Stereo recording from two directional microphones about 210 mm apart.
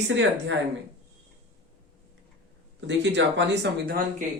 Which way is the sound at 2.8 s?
55° right (ahead or behind).